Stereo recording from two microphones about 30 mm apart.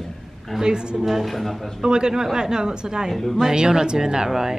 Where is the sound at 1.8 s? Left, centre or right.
Right.